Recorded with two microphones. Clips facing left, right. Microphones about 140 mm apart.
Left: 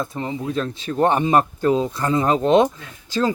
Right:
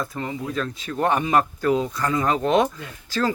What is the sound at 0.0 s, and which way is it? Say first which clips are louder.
Speech: left 3 dB; 25° left (ahead or behind).